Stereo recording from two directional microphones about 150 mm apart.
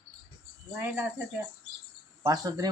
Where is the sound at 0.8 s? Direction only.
10° right (ahead or behind).